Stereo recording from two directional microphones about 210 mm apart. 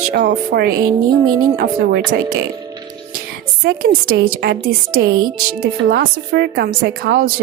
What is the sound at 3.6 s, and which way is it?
Speech, 50° right (ahead or behind).